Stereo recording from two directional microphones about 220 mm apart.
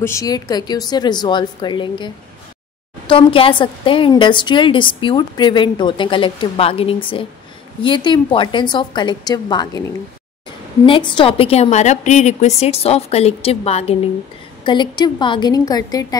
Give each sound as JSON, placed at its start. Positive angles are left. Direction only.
{"t": 0.0, "sound": "a woman's voice", "side_deg": 15}
{"t": 10.9, "sound": "a woman's voice", "side_deg": 20}